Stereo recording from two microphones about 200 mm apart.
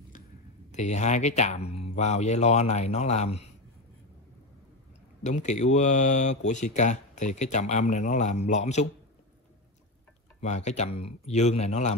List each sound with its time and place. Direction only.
0.7 s speech: 35° left (ahead or behind)
5.2 s speech: 35° left (ahead or behind)
10.4 s speech: 35° left (ahead or behind)